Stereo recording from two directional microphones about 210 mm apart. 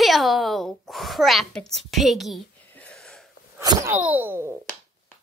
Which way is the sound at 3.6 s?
15° right (ahead or behind).